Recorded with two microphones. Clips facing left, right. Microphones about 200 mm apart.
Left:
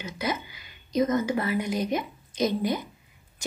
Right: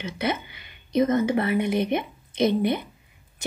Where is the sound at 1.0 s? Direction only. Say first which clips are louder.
Right 3 dB; 25° right (ahead or behind).